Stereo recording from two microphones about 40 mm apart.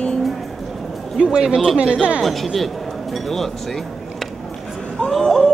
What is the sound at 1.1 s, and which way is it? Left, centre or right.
Speech, centre.